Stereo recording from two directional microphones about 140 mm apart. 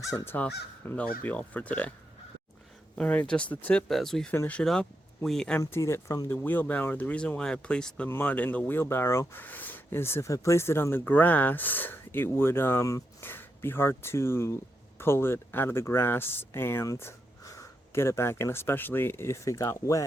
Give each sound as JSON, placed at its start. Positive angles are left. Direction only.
{"t": 0.1, "sound": "speech", "side_deg": 25}
{"t": 3.0, "sound": "speech", "side_deg": 10}
{"t": 5.5, "sound": "speech", "side_deg": 20}